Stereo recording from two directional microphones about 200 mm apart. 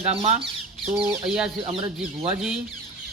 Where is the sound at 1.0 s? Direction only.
5° right (ahead or behind).